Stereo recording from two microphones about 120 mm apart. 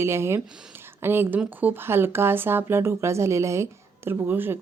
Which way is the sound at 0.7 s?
20° right (ahead or behind).